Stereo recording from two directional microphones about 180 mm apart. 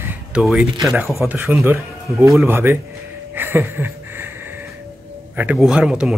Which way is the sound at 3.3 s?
10° right (ahead or behind).